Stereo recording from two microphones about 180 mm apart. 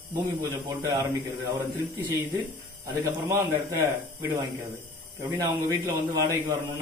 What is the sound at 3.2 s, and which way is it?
Speech, 15° right (ahead or behind).